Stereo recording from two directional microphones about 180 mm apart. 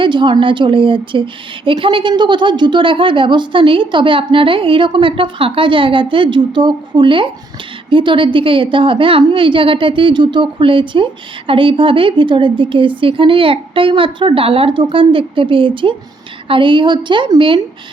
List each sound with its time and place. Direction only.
0.0 s a woman's voice: 25° right (ahead or behind)